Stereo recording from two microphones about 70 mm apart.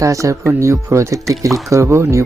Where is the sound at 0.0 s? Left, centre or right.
Right.